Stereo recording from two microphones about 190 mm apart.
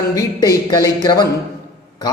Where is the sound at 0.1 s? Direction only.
20° left (ahead or behind).